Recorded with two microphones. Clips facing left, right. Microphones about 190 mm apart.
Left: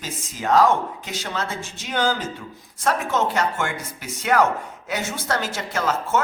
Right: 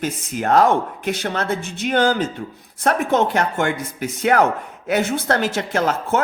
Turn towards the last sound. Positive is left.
turn(degrees=-60)  # may be behind; listen again after turning